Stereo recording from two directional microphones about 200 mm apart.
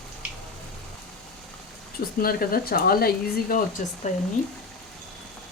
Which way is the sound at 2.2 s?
50° left (ahead or behind).